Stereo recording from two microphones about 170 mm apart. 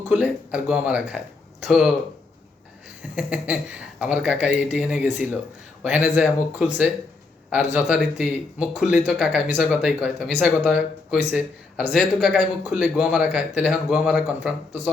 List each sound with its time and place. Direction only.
0.1 s speech: 5° right (ahead or behind)
3.2 s speech: 5° right (ahead or behind)